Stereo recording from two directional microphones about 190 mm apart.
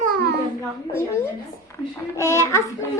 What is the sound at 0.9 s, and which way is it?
A child's voice, 10° left (ahead or behind).